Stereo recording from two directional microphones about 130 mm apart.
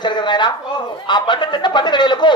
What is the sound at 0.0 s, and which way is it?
Speech, 35° left (ahead or behind).